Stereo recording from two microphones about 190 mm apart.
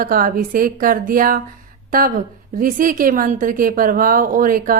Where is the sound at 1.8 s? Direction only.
50° right (ahead or behind).